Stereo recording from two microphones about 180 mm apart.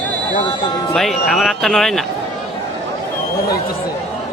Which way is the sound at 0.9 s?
Centre (ahead or behind).